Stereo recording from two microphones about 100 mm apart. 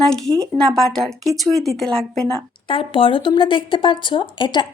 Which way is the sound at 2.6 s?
60° left (ahead or behind).